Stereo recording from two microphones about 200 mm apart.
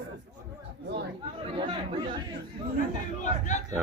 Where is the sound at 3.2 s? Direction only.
35° left (ahead or behind).